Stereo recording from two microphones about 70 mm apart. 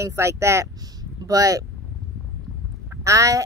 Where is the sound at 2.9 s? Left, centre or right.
Right.